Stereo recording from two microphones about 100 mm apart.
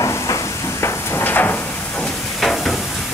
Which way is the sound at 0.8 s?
20° left (ahead or behind).